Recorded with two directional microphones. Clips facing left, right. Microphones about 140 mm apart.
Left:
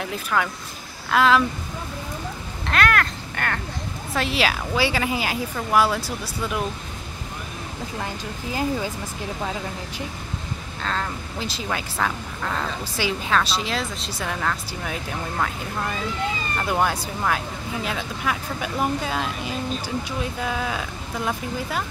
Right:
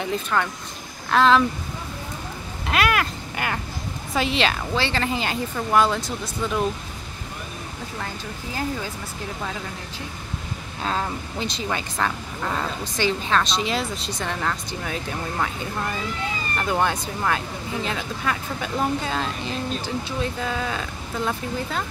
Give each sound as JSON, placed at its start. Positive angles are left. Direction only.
{"t": 0.0, "sound": "a woman's voice", "side_deg": 0}
{"t": 2.6, "sound": "a woman's voice", "side_deg": -10}
{"t": 10.8, "sound": "speech", "side_deg": -15}
{"t": 11.3, "sound": "a woman's voice", "side_deg": 5}